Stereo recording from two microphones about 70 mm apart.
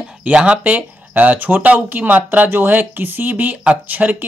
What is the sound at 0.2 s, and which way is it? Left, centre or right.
Speech, centre.